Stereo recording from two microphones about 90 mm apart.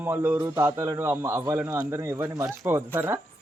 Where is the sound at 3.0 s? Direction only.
25° right (ahead or behind).